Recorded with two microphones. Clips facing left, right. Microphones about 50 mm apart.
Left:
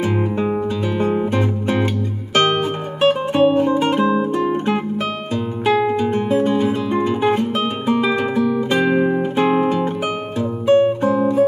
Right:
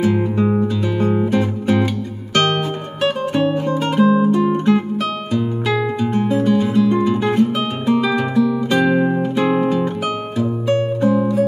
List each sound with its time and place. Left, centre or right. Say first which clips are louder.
0.0 s music: right 2 dB; centre
5.3 s music: left 2 dB; left
5.9 s music: left 1 dB; centre